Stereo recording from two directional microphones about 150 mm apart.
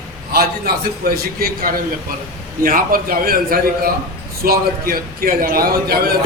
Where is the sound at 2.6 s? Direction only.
75° right (ahead or behind).